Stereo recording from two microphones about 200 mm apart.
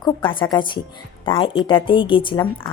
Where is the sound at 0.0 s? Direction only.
25° left (ahead or behind).